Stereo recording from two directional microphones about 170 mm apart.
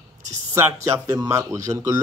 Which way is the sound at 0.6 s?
15° right (ahead or behind).